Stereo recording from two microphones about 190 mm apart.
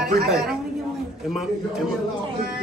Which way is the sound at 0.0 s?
55° right (ahead or behind).